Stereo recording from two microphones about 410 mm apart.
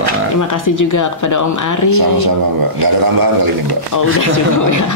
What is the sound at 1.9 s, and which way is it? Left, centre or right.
A man's voice, right.